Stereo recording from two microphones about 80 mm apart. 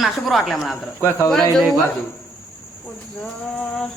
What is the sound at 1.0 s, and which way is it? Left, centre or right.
Speech, left.